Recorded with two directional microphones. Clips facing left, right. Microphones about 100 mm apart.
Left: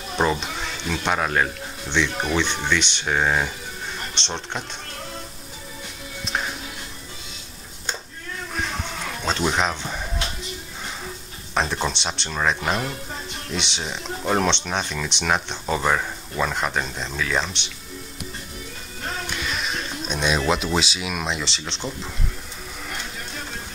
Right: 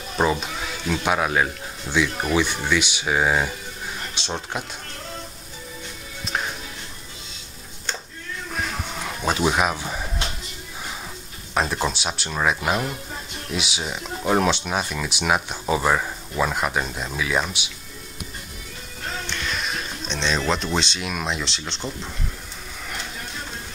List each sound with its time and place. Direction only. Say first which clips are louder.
0.1 s speech: even; 5° right (ahead or behind)
8.5 s music: even; 10° right (ahead or behind)
11.5 s speech: right 1 dB; 5° right (ahead or behind)
19.2 s a sound: right 1 dB; 5° left (ahead or behind)
20.2 s speech: left 2 dB; 10° left (ahead or behind)